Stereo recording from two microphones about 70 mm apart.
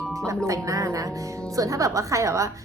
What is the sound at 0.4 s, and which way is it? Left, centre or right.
Speech, right.